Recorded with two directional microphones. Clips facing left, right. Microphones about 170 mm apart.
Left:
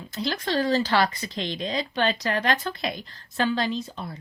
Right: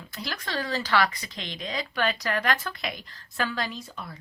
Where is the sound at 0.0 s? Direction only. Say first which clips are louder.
Left 7 dB; 25° left (ahead or behind).